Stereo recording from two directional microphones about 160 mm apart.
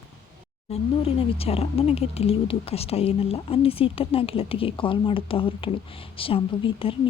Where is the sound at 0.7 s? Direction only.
40° left (ahead or behind).